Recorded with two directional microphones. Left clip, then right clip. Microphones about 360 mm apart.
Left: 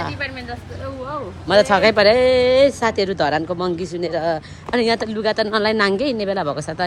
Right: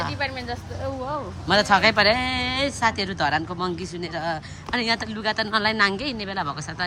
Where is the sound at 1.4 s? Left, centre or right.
Centre.